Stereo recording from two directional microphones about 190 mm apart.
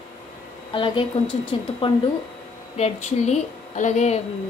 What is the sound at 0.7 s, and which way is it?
Speech, 25° left (ahead or behind).